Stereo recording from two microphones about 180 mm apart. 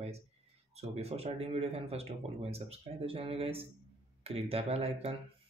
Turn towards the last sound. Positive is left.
turn(degrees=-35)  # may be behind; listen again after turning